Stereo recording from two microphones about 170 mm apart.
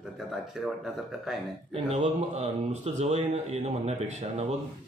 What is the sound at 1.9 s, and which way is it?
Speech, 40° right (ahead or behind).